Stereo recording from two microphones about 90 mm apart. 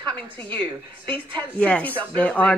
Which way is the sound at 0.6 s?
60° right (ahead or behind).